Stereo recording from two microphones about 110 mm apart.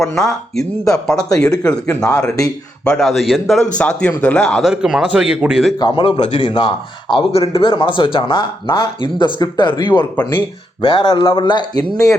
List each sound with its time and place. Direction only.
0.0 s speech: 5° left (ahead or behind)
5.8 s speech: 45° left (ahead or behind)